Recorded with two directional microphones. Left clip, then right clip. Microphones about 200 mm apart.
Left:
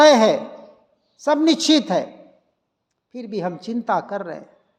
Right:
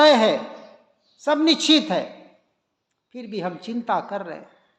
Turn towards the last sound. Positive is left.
turn(degrees=45)  # may be behind; listen again after turning